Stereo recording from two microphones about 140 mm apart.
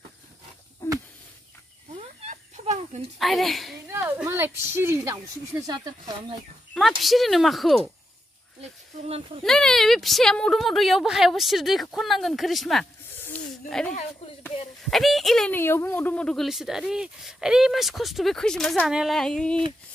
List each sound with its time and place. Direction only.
2.0 s a sound: 50° right (ahead or behind)
3.2 s speech: centre (ahead or behind)
3.8 s speech: 20° right (ahead or behind)
6.7 s speech: centre (ahead or behind)
8.5 s speech: 50° right (ahead or behind)
9.4 s speech: 5° left (ahead or behind)
13.1 s snake: 15° left (ahead or behind)
13.7 s speech: 5° left (ahead or behind)
15.5 s speech: 15° left (ahead or behind)